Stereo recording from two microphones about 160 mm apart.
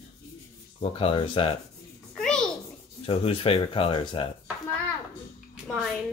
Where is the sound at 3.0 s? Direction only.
35° left (ahead or behind).